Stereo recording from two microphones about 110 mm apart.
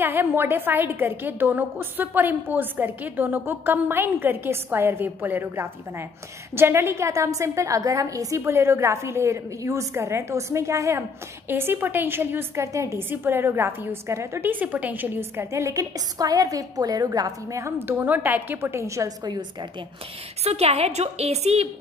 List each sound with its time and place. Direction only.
0.0 s a woman's voice: 20° right (ahead or behind)
19.2 s a woman's voice: 40° right (ahead or behind)
20.4 s a woman's voice: 70° right (ahead or behind)